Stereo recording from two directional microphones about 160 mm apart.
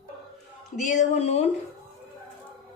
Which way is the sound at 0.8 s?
50° left (ahead or behind).